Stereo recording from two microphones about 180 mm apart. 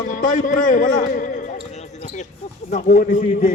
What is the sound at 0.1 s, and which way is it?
A man's voice, 45° left (ahead or behind).